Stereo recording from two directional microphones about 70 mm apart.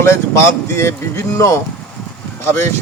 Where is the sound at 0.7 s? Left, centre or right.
Left.